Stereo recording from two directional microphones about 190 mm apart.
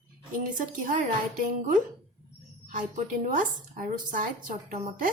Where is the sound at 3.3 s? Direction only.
45° right (ahead or behind).